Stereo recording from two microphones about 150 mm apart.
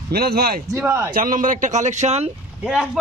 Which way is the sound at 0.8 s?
15° right (ahead or behind).